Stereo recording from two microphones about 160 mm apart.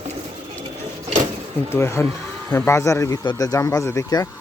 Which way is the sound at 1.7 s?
15° left (ahead or behind).